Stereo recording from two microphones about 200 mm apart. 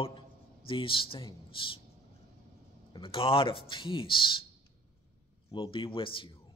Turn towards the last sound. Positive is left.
turn(degrees=25)  # may be behind; listen again after turning